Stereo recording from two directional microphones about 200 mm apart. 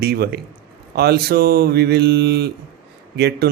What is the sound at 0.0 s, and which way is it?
Mantra, 50° right (ahead or behind).